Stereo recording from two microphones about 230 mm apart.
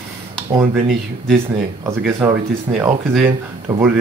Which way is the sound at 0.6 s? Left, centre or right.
Centre.